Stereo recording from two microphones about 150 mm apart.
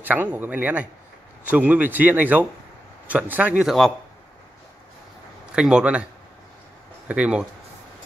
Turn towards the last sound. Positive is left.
turn(degrees=-10)  # may be behind; listen again after turning